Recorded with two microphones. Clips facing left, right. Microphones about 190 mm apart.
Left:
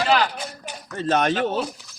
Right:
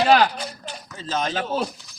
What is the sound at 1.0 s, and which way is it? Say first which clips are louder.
Speech: left 5 dB; 65° left (ahead or behind).